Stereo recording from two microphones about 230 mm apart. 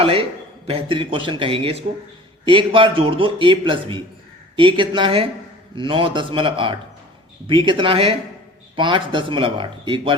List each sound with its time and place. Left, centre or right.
0.0 s a man's voice: right